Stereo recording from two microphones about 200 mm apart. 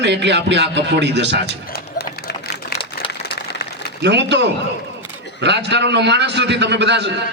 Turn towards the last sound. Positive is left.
turn(degrees=-60)  # may be behind; listen again after turning